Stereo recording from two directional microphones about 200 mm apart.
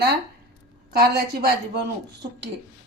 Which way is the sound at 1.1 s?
50° right (ahead or behind).